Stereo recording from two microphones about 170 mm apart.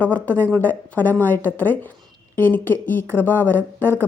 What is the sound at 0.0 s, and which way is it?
Speech, 10° left (ahead or behind).